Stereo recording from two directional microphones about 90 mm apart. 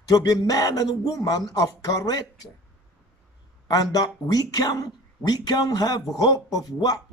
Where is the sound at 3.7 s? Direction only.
45° left (ahead or behind).